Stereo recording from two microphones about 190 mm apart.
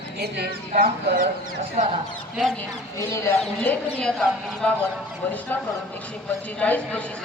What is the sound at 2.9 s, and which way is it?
Speech, 15° left (ahead or behind).